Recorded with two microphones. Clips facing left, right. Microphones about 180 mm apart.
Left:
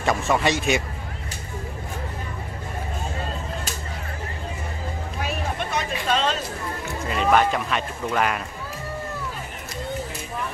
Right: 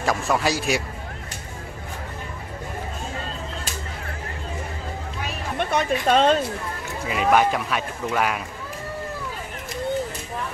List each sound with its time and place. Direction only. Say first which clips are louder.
0.0 s speech: left 1 dB; centre (ahead or behind)
5.7 s a woman's voice: right 6 dB; 55° right (ahead or behind)
7.1 s speech: right 1 dB; 5° right (ahead or behind)